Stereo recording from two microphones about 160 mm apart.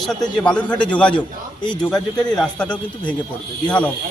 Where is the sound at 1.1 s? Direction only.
30° left (ahead or behind).